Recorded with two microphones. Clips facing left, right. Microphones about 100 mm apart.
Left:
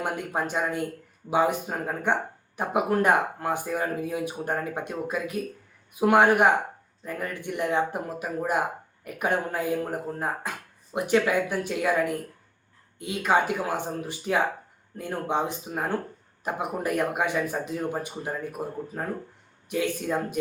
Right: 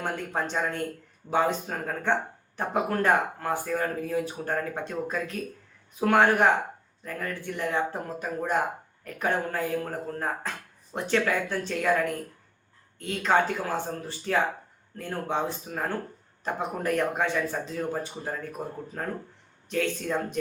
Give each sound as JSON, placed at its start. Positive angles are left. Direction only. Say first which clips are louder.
{"t": 0.0, "sound": "speech", "louder": "left 2 dB", "side_deg": 10}